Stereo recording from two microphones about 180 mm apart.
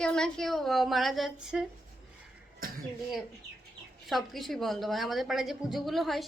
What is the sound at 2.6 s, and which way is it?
Cough, 55° right (ahead or behind).